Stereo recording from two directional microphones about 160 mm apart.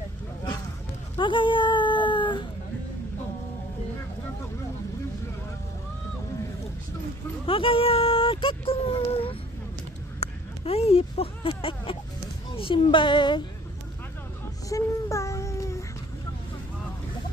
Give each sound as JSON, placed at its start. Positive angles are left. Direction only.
{"t": 1.1, "sound": "dog", "side_deg": 30}
{"t": 7.4, "sound": "speech", "side_deg": 35}
{"t": 14.7, "sound": "a sound", "side_deg": 20}